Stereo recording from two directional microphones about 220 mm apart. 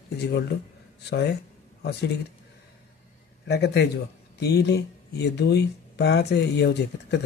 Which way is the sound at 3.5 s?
50° left (ahead or behind).